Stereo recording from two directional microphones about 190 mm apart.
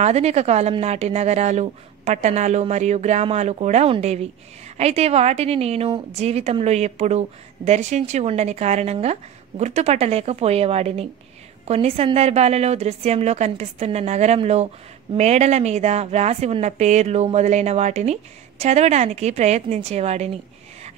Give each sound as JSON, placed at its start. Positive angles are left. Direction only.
{"t": 0.0, "sound": "a woman's voice", "side_deg": -35}